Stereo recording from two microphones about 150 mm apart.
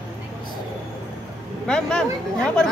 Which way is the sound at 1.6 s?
5° left (ahead or behind).